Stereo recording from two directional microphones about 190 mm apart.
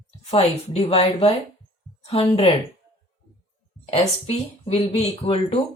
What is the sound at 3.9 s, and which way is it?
Speech, 30° left (ahead or behind).